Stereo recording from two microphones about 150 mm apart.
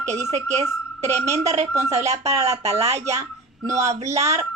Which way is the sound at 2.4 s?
45° right (ahead or behind).